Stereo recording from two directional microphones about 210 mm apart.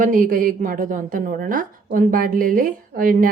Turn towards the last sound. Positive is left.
turn(degrees=-40)  # may be behind; listen again after turning